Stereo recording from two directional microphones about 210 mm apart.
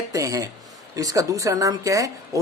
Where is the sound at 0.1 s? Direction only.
15° right (ahead or behind).